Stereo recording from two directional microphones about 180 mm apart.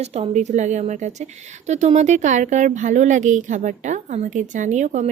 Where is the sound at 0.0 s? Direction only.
40° right (ahead or behind).